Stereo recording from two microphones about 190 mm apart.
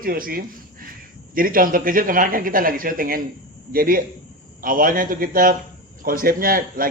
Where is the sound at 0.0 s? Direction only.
50° right (ahead or behind).